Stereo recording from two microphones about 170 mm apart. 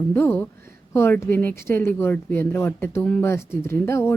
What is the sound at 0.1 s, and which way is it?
Speech, 10° left (ahead or behind).